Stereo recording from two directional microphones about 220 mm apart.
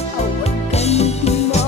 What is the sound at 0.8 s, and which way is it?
Music, 30° left (ahead or behind).